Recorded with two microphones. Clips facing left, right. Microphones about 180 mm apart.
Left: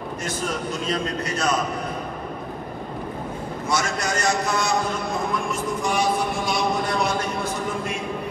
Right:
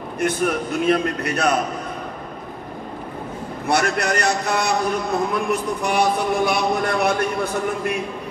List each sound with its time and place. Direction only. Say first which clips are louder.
0.2 s speech: right 8 dB; 60° right (ahead or behind)
3.6 s speech: right 5 dB; 60° right (ahead or behind)